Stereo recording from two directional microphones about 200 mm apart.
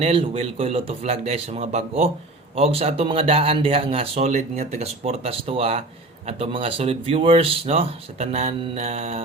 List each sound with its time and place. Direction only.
0.0 s speech: 30° right (ahead or behind)